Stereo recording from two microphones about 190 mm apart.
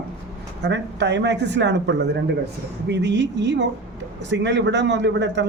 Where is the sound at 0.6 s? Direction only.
65° right (ahead or behind).